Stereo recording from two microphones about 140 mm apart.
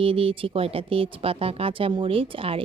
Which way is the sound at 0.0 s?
40° right (ahead or behind).